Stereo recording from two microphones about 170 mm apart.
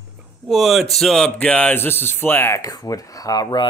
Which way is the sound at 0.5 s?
Centre (ahead or behind).